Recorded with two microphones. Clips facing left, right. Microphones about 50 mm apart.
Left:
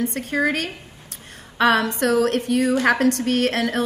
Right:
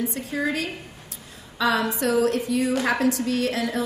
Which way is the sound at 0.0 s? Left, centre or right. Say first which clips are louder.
Left 5 dB; left.